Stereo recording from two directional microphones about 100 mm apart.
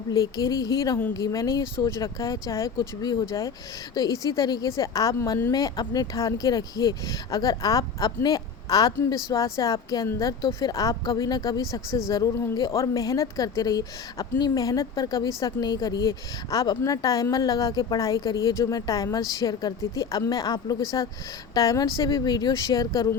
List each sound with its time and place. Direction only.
0.1 s a woman's voice: 40° left (ahead or behind)